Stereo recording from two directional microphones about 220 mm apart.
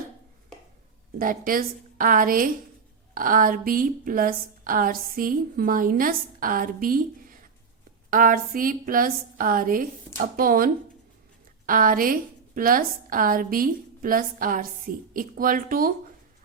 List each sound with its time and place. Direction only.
1.2 s a woman's voice: 40° right (ahead or behind)